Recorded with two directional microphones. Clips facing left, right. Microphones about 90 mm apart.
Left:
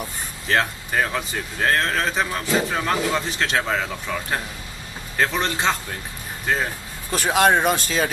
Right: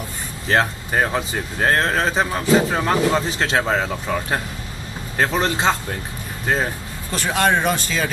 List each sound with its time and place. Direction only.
0.5 s a man's voice: 30° right (ahead or behind)
6.4 s speech: 35° right (ahead or behind)
7.1 s speech: 5° left (ahead or behind)